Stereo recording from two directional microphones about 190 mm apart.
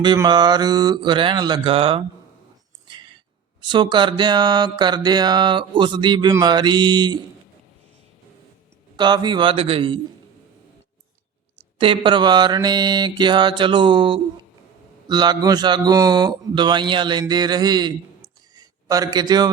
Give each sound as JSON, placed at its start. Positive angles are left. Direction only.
{"t": 0.0, "sound": "mantra", "side_deg": -25}
{"t": 3.6, "sound": "mantra", "side_deg": -25}
{"t": 9.0, "sound": "mantra", "side_deg": -25}
{"t": 11.8, "sound": "mantra", "side_deg": -25}
{"t": 18.5, "sound": "a sound", "side_deg": -20}